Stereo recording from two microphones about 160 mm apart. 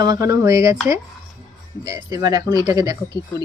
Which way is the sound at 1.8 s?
25° right (ahead or behind).